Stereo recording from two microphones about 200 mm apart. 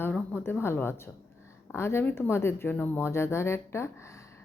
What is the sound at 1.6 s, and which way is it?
A woman's voice, 10° left (ahead or behind).